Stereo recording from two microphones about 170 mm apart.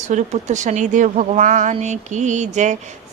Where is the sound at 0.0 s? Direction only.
45° right (ahead or behind).